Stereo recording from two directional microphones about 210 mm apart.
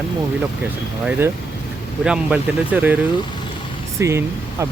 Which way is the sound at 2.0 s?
5° right (ahead or behind).